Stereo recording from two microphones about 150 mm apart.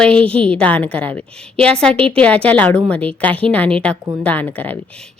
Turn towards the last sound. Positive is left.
turn(degrees=10)  # may be behind; listen again after turning